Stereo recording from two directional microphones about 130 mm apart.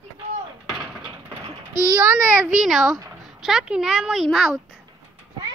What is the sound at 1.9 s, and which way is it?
Speech, 15° right (ahead or behind).